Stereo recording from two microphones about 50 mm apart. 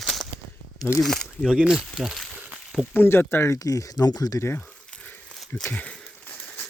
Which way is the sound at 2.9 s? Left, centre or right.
Left.